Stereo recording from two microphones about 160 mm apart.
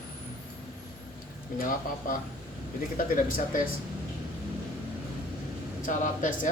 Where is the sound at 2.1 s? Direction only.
60° left (ahead or behind).